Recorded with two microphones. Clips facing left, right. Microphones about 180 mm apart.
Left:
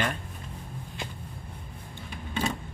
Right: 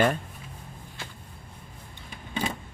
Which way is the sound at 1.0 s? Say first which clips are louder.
Left 4 dB; 15° left (ahead or behind).